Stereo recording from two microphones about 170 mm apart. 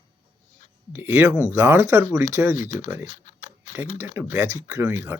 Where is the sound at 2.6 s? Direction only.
45° left (ahead or behind).